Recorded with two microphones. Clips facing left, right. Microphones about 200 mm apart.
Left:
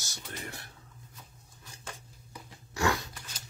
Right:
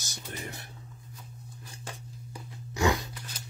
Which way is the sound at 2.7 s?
15° right (ahead or behind).